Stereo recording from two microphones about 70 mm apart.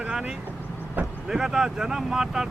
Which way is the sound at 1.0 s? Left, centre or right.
Right.